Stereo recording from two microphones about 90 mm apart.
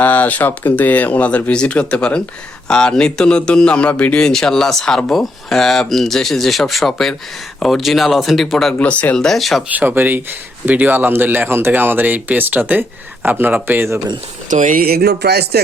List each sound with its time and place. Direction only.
0.0 s speech: 20° left (ahead or behind); by 8.7 s centre (ahead or behind)
8.8 s speech: 15° left (ahead or behind)
9.2 s speech: centre (ahead or behind)
9.6 s speech: 20° right (ahead or behind)